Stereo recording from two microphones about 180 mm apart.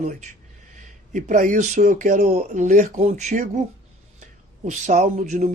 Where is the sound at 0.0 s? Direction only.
40° right (ahead or behind).